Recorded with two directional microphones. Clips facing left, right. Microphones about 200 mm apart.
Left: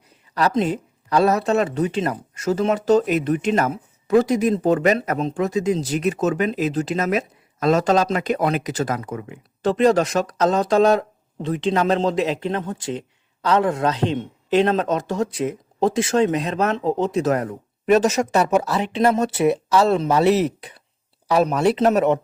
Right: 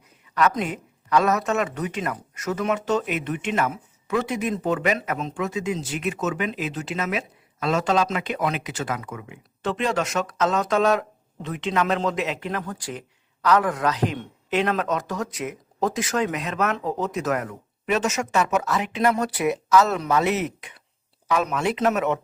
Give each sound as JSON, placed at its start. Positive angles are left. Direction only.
{"t": 0.3, "sound": "speech", "side_deg": 30}